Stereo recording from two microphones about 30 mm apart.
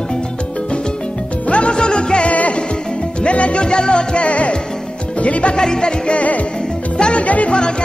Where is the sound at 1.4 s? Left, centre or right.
Left.